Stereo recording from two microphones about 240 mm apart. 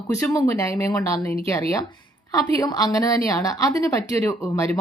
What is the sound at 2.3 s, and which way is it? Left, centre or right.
Speech, centre.